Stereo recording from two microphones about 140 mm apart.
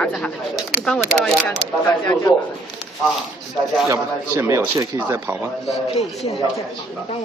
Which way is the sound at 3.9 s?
20° right (ahead or behind).